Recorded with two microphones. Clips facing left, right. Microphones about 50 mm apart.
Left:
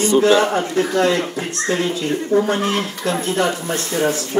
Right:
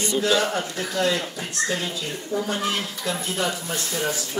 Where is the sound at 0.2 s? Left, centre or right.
Left.